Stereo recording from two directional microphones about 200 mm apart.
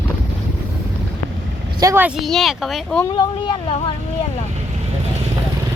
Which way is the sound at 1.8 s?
10° right (ahead or behind).